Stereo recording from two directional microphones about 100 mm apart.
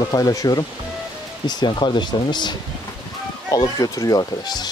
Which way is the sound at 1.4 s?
50° left (ahead or behind).